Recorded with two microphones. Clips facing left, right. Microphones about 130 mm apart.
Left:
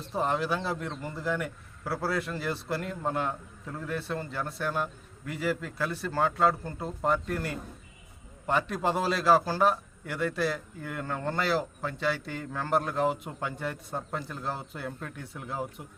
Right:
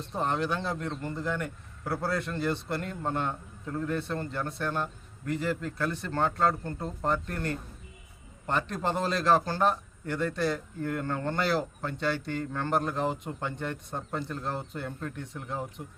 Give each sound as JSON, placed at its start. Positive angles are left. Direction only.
{"t": 0.1, "sound": "a man's voice", "side_deg": 5}